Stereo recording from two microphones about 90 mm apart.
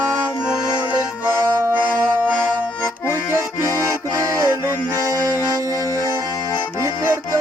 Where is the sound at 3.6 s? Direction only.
40° right (ahead or behind).